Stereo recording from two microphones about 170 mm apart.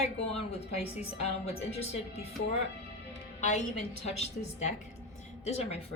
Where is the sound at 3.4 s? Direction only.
45° left (ahead or behind).